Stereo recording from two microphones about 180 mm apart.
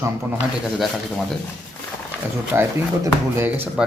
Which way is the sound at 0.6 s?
Centre (ahead or behind).